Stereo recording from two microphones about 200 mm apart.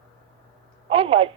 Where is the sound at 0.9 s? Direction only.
30° right (ahead or behind).